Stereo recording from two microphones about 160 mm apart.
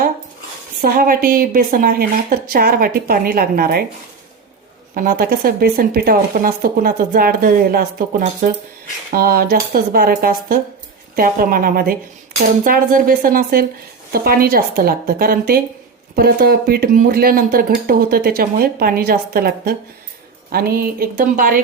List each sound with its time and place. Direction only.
0.8 s speech: 65° right (ahead or behind)
4.9 s speech: 65° right (ahead or behind)